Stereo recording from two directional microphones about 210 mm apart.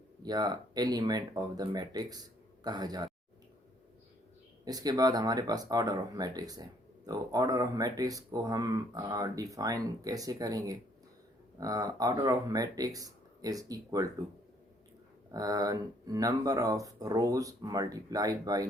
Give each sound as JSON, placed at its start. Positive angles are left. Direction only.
{"t": 0.2, "sound": "speech", "side_deg": -20}
{"t": 4.6, "sound": "speech", "side_deg": -20}
{"t": 15.3, "sound": "speech", "side_deg": -15}